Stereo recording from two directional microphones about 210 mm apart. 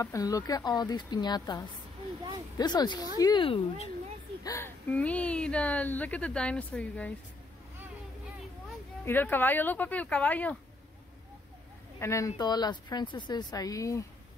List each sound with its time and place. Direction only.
0.0 s a woman's voice: 15° left (ahead or behind)
4.4 s speech: 15° left (ahead or behind)
9.0 s speech: 10° left (ahead or behind)
12.0 s a woman's voice: 15° left (ahead or behind)